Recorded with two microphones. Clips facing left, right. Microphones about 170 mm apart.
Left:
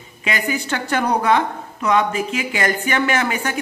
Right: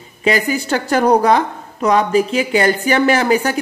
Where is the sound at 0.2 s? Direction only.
35° right (ahead or behind).